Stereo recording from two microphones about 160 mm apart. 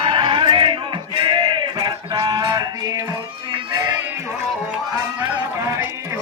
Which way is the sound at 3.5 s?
25° right (ahead or behind).